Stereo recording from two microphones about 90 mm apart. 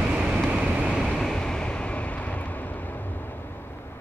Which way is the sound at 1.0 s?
5° left (ahead or behind).